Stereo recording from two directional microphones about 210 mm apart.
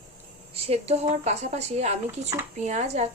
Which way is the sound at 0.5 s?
30° right (ahead or behind).